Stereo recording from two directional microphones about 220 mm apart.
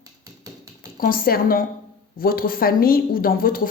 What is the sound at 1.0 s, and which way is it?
A woman's voice, 40° left (ahead or behind).